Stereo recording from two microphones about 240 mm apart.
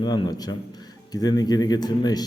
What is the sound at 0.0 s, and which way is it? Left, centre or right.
A man's voice, centre.